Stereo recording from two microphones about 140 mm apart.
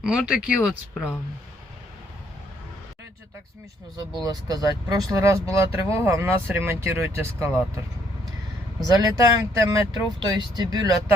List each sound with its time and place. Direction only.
0.0 s speech: 5° right (ahead or behind)
4.2 s speech: 25° right (ahead or behind)
8.9 s speech: 25° right (ahead or behind)